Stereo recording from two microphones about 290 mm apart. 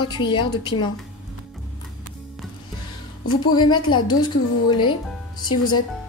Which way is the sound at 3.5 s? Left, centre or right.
Centre.